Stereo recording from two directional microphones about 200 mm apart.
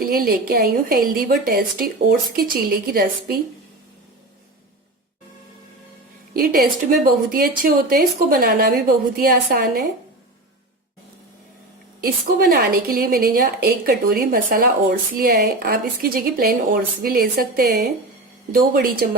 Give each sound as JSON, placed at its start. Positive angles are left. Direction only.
{"t": 0.0, "sound": "a woman's voice", "side_deg": -45}
{"t": 6.3, "sound": "a woman's voice", "side_deg": -45}
{"t": 11.9, "sound": "a woman's voice", "side_deg": -45}